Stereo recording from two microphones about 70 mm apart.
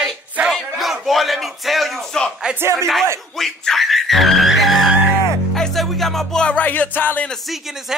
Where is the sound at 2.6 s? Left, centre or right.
Right.